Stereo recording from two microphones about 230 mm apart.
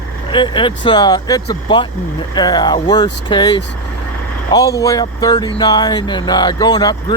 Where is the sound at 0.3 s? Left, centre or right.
Left.